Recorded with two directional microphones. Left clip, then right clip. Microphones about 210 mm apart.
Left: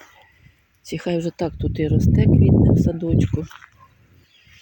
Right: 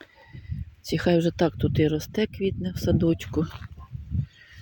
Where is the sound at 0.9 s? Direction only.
5° right (ahead or behind).